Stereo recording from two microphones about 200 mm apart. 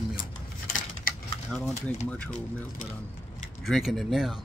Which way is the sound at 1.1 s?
45° left (ahead or behind).